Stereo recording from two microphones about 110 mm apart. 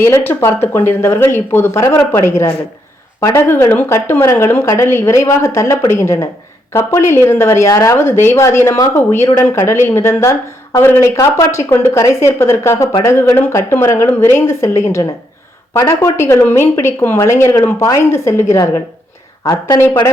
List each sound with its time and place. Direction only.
0.0 s a woman's voice: 20° left (ahead or behind)